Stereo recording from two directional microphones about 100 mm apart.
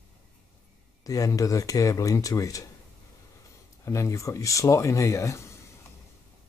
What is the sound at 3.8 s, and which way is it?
Speech, 30° left (ahead or behind).